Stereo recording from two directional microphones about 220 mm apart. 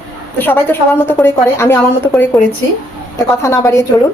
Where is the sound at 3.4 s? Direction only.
15° left (ahead or behind).